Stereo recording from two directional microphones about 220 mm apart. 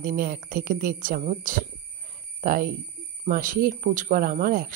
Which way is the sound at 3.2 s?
40° right (ahead or behind).